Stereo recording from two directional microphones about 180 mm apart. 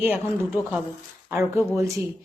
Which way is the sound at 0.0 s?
10° right (ahead or behind).